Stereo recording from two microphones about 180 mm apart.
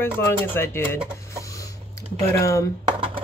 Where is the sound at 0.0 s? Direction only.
15° left (ahead or behind).